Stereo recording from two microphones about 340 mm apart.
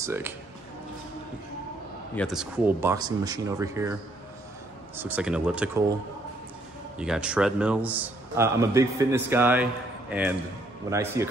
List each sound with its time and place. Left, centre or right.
0.0 s speech: centre
2.1 s speech: centre
4.9 s a man's voice: centre
7.0 s a man's voice: centre
10.9 s speech: centre